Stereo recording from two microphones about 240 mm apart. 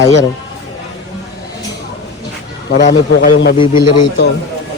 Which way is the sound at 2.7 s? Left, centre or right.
Left.